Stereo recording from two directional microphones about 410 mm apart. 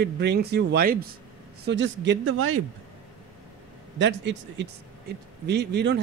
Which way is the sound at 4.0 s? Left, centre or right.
Right.